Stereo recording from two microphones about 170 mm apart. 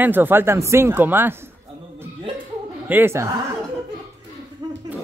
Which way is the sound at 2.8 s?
10° right (ahead or behind).